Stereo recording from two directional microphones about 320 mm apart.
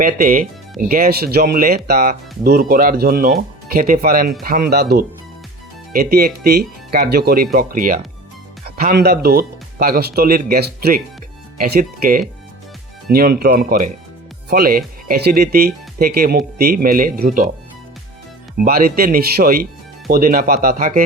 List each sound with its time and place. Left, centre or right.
0.0 s speech: right
18.6 s speech: right